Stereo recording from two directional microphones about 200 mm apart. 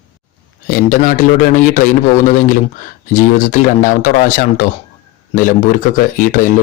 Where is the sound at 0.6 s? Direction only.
45° left (ahead or behind).